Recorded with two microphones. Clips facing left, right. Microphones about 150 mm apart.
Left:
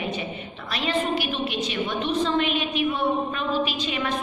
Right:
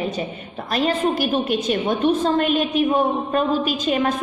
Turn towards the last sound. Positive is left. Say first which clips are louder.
# right 7 dB
turn(degrees=-45)  # may be behind; listen again after turning